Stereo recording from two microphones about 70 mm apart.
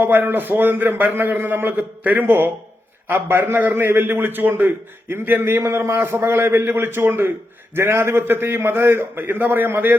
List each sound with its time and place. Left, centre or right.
0.0 s a man's voice: right
6.0 s a man's voice: right